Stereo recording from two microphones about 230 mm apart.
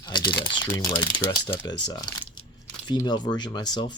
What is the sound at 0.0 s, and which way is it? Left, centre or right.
Typing, centre.